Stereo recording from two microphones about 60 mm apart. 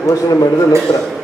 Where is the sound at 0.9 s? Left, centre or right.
Left.